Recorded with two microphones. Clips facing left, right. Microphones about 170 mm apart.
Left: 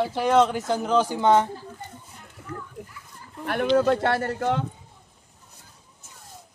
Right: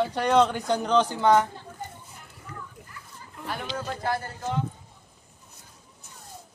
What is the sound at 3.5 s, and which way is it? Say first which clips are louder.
Speech: left 13 dB; 65° left (ahead or behind).